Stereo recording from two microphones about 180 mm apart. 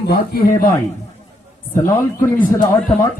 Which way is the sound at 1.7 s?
15° left (ahead or behind).